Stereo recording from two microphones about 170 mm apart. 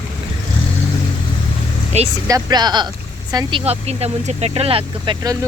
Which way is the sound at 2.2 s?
20° right (ahead or behind).